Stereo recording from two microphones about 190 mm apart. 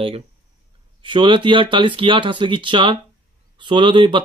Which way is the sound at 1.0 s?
25° right (ahead or behind).